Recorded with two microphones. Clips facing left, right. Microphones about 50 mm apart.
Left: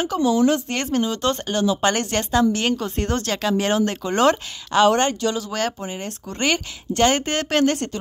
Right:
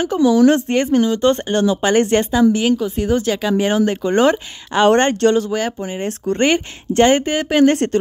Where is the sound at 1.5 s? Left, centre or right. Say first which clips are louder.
Right 4 dB; right.